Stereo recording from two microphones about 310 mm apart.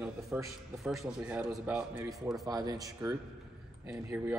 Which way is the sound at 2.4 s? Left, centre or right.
Centre.